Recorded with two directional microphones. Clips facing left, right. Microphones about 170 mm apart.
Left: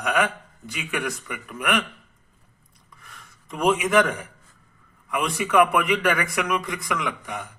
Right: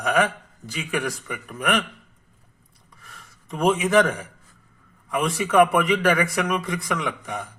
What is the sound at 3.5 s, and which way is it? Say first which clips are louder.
Speech: right 1 dB; 25° right (ahead or behind).